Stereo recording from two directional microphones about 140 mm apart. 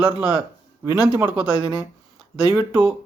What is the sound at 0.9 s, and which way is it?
Speech, 30° right (ahead or behind).